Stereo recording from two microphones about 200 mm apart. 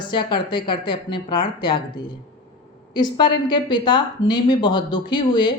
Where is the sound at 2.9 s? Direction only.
20° left (ahead or behind).